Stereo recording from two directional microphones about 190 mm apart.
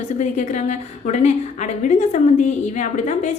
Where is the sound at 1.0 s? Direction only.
35° left (ahead or behind).